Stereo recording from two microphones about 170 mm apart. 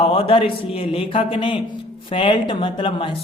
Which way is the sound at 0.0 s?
35° left (ahead or behind).